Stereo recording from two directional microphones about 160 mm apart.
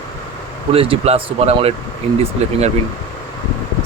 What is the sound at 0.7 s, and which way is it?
Speech, 35° right (ahead or behind).